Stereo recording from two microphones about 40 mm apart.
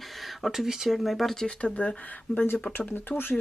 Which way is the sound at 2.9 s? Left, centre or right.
Left.